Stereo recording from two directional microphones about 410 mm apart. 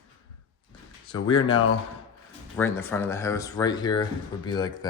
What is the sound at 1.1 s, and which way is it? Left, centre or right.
Speech, centre.